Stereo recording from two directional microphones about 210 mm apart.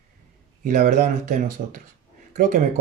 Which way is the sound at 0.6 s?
45° right (ahead or behind).